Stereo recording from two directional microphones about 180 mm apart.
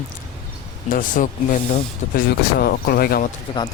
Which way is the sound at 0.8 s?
50° left (ahead or behind).